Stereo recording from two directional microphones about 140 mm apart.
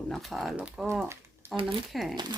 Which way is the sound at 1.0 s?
20° right (ahead or behind).